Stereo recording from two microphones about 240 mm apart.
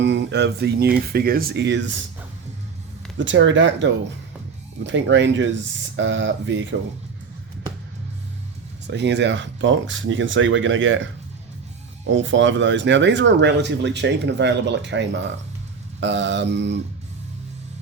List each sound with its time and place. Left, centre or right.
0.0 s speech: right
3.2 s speech: right
8.9 s speech: right